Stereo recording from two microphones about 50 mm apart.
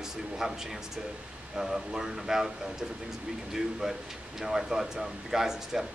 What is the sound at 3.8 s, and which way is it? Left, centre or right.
Speech, centre.